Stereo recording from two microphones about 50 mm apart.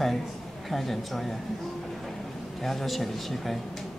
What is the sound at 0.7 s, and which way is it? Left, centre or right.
Speech, centre.